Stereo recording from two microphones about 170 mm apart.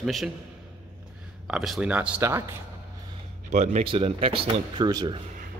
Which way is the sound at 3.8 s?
30° right (ahead or behind).